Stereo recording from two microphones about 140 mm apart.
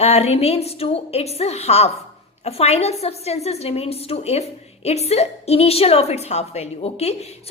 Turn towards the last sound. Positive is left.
turn(degrees=50)  # may be behind; listen again after turning